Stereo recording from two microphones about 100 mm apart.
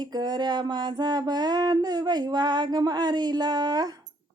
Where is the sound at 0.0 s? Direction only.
45° right (ahead or behind).